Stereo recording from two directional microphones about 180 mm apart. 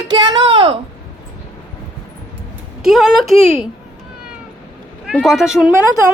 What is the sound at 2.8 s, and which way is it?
Speech, centre (ahead or behind).